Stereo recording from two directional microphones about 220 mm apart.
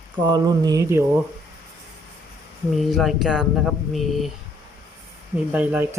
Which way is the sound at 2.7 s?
Centre (ahead or behind).